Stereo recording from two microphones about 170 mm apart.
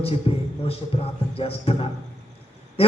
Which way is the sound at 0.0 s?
35° left (ahead or behind).